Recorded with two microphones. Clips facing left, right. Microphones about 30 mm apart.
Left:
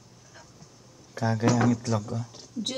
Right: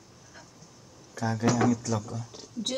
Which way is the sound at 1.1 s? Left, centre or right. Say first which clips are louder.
Left 2 dB; centre.